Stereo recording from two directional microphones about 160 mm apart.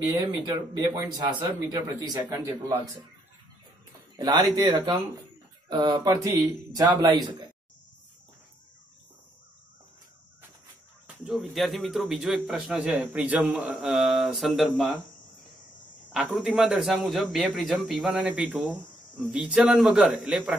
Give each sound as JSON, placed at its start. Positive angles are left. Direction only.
{"t": 0.5, "sound": "speech", "side_deg": -20}
{"t": 4.2, "sound": "speech", "side_deg": -25}
{"t": 11.2, "sound": "a man's voice", "side_deg": 0}
{"t": 16.1, "sound": "a man's voice", "side_deg": 0}